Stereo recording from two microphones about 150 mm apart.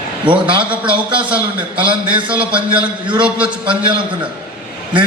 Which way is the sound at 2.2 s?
35° right (ahead or behind).